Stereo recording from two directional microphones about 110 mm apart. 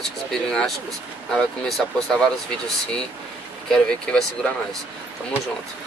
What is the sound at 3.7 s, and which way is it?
Speech, 5° left (ahead or behind).